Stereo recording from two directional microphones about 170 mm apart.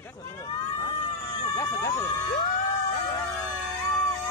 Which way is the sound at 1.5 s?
20° left (ahead or behind).